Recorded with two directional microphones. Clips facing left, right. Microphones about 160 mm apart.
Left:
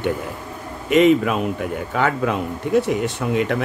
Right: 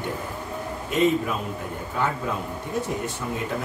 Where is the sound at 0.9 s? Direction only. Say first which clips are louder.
Left 8 dB; 80° left.